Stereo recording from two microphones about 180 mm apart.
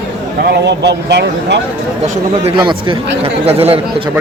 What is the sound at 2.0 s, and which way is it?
Speech, 40° right (ahead or behind).